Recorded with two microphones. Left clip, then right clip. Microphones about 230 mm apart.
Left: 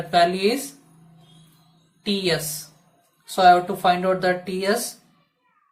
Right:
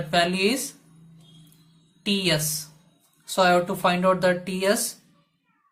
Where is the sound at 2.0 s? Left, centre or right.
Right.